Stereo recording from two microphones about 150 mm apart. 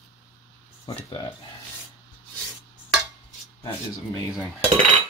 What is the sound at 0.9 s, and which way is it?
Speech, 35° left (ahead or behind).